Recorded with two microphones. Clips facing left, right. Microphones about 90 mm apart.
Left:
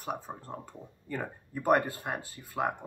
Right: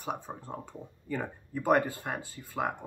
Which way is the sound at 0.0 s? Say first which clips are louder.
Even; centre (ahead or behind).